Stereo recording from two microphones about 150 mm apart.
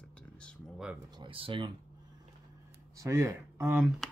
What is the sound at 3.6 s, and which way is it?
Speech, 10° right (ahead or behind).